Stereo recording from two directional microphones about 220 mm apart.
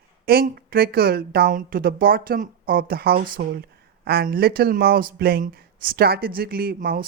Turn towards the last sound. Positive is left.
turn(degrees=-45)  # may be behind; listen again after turning